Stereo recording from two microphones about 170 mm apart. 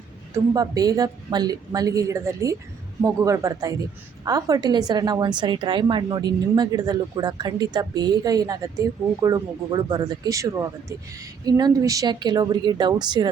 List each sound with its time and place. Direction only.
0.3 s a woman's voice: 20° right (ahead or behind)